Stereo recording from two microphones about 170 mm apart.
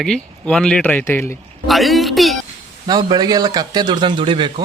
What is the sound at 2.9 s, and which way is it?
Speech, 25° right (ahead or behind).